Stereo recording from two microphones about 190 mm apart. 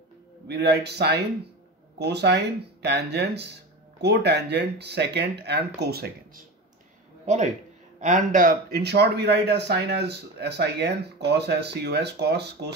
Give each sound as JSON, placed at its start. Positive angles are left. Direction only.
{"t": 0.5, "sound": "speech", "side_deg": -60}
{"t": 7.2, "sound": "a man's voice", "side_deg": -40}